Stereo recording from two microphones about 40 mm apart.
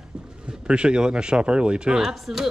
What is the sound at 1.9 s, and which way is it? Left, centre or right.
Speech, centre.